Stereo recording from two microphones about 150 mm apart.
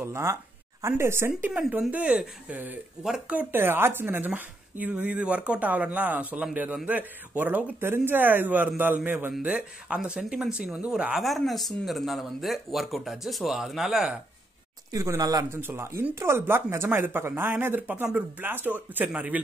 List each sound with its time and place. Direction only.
0.0 s a sound: 20° right (ahead or behind)
0.8 s speech: 15° right (ahead or behind)
14.9 s speech: 25° right (ahead or behind)